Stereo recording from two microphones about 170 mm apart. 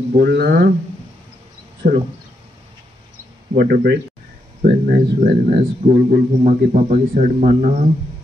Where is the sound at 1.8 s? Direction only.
45° right (ahead or behind).